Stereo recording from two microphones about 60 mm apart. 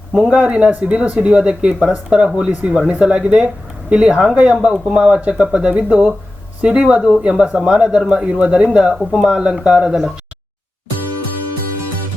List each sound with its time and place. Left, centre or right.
0.3 s speech: right